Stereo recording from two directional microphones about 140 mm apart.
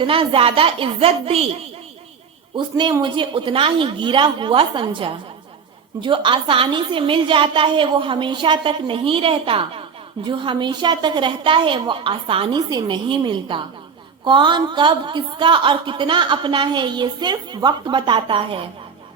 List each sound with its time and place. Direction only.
0.0 s a woman's voice: 40° right (ahead or behind)
2.6 s a woman's voice: 35° right (ahead or behind)